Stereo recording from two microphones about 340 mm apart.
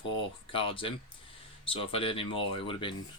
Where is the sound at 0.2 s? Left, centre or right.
Centre.